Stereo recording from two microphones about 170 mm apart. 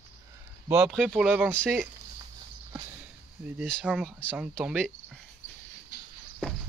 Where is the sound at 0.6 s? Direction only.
10° right (ahead or behind).